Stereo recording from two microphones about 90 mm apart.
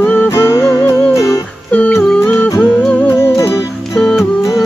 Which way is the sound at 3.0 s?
30° left (ahead or behind).